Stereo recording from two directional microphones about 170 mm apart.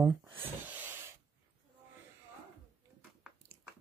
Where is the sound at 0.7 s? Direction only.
15° right (ahead or behind).